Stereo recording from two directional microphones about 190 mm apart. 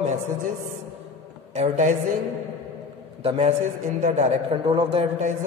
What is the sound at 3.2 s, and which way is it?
A woman's voice, 30° right (ahead or behind).